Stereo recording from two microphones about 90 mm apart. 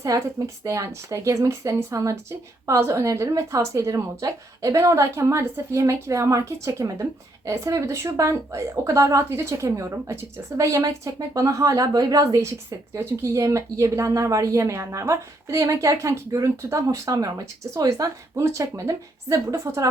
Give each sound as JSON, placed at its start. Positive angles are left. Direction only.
{"t": 0.0, "sound": "a woman's voice", "side_deg": -35}